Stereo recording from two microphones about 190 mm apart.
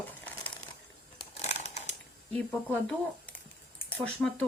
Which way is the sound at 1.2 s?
35° left (ahead or behind).